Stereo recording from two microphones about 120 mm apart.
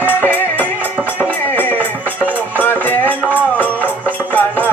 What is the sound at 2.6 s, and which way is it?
Music, 15° left (ahead or behind).